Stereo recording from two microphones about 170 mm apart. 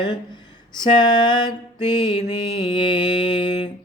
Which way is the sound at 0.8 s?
25° left (ahead or behind).